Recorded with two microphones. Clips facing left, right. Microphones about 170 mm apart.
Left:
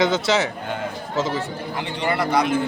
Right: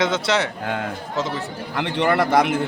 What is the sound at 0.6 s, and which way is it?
Speech, 75° right (ahead or behind).